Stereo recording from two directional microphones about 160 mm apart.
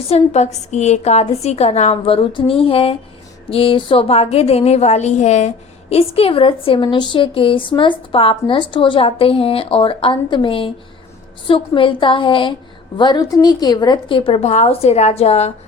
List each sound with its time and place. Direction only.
0.1 s a woman's voice: 45° left (ahead or behind)